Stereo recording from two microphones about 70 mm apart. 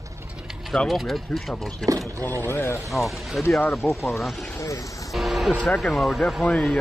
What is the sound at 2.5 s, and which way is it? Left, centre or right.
Speech, left.